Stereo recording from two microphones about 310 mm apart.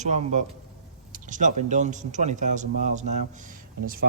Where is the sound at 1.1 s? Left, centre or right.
Right.